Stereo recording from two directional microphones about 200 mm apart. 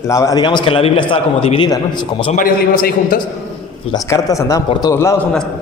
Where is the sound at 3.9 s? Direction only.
15° left (ahead or behind).